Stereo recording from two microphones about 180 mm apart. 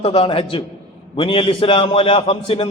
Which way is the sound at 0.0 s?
30° left (ahead or behind).